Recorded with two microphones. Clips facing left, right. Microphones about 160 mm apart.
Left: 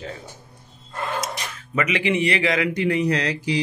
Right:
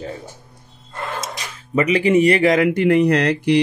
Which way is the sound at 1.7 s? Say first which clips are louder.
Right 7 dB; 35° right (ahead or behind).